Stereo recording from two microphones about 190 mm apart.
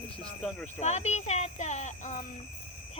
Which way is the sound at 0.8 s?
35° left (ahead or behind).